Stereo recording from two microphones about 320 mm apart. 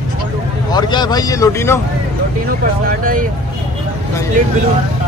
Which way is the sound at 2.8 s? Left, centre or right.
Right.